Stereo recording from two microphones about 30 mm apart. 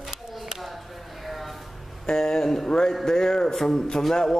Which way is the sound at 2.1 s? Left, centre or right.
Centre.